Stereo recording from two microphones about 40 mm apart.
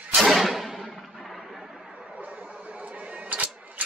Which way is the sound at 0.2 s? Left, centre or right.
Centre.